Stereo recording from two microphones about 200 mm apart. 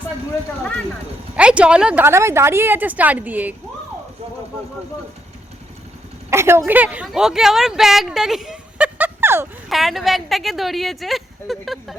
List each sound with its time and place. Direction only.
1.4 s a woman's voice: 5° right (ahead or behind)
6.3 s a woman's voice: 15° right (ahead or behind)
9.6 s speech: centre (ahead or behind)